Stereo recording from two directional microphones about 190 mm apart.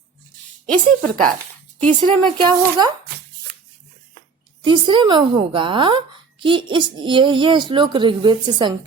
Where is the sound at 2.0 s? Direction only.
25° right (ahead or behind).